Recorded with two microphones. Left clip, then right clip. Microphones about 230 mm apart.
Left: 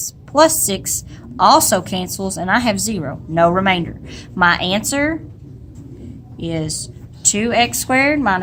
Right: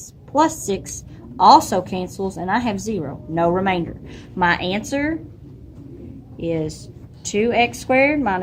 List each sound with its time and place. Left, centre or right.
0.0 s a woman's voice: left
6.4 s a woman's voice: left